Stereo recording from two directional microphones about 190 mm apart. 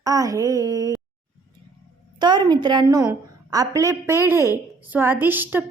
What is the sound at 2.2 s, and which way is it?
A woman's voice, 25° right (ahead or behind).